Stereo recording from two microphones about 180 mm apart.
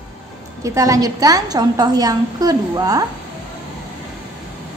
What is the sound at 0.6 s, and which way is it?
A woman's voice, 20° right (ahead or behind).